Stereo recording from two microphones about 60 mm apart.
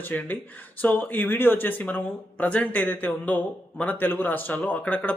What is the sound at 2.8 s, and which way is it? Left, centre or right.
Speech, left.